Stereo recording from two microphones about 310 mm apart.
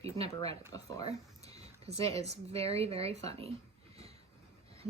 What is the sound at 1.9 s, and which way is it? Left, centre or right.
Speech, centre.